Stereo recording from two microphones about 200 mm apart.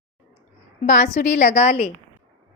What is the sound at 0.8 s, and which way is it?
A woman's voice, 35° left (ahead or behind).